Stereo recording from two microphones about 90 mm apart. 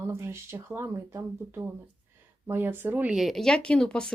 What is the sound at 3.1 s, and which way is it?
Speech, centre (ahead or behind).